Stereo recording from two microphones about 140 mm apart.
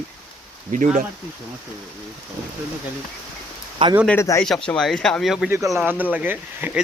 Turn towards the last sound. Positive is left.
turn(degrees=-15)  # may be behind; listen again after turning